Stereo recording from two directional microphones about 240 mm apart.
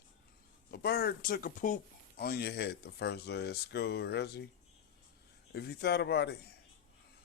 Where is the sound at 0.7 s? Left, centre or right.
Left.